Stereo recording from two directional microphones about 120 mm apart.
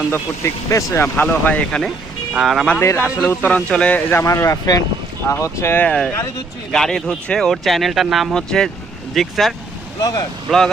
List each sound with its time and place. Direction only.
0.1 s speech: 25° left (ahead or behind)
2.3 s speech: centre (ahead or behind)
2.8 s a man's voice: 15° left (ahead or behind)
4.2 s speech: 25° left (ahead or behind); by 9.6 s centre (ahead or behind)
10.0 s speech: 30° left (ahead or behind)
10.5 s speech: centre (ahead or behind)